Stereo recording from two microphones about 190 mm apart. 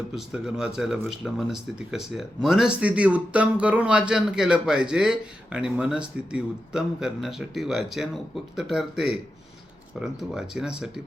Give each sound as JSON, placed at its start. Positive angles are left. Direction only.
{"t": 0.4, "sound": "speech", "side_deg": -5}